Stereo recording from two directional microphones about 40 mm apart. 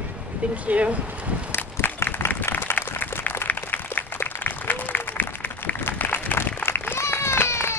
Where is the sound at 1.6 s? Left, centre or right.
Left.